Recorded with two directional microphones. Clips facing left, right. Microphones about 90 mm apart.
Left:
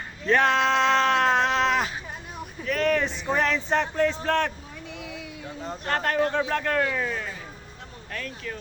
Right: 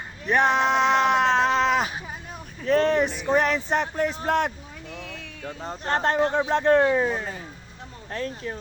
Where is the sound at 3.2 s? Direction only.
5° right (ahead or behind).